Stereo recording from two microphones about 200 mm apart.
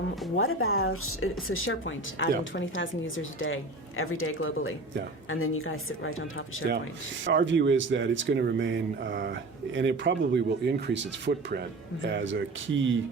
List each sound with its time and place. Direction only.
0.3 s a woman's voice: 90° left
7.3 s speech: 65° right (ahead or behind)